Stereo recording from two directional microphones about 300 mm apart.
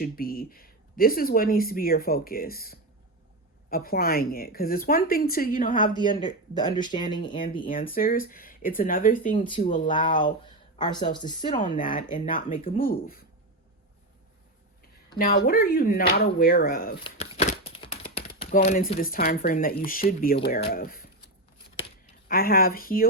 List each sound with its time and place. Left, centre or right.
0.0 s speech: left
7.7 s speech: left
12.0 s speech: left
15.1 s speech: left
22.3 s speech: left